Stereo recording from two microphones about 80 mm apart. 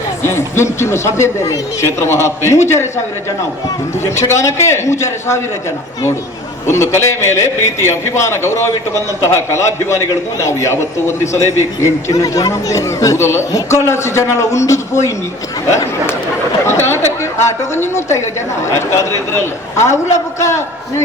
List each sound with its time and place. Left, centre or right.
0.3 s speech: left
4.0 s speech: left
6.9 s speech: left
16.6 s a man's voice: left